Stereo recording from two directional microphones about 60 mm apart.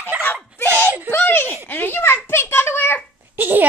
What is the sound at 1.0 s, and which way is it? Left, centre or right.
A child's voice, left.